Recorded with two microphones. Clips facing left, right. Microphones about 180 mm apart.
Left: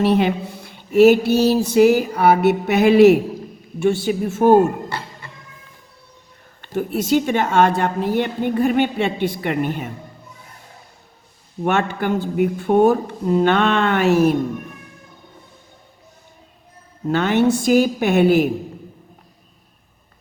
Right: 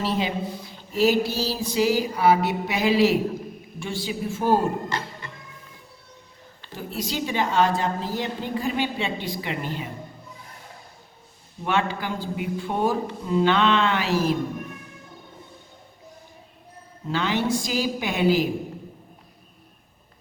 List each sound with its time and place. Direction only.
0.0 s a sound: 60° left (ahead or behind)
1.5 s a woman's voice: 55° left (ahead or behind)
6.6 s a woman's voice: 55° left (ahead or behind)
11.6 s a woman's voice: 50° left (ahead or behind)
13.2 s a sound: 50° left (ahead or behind)
17.1 s a woman's voice: 60° left (ahead or behind)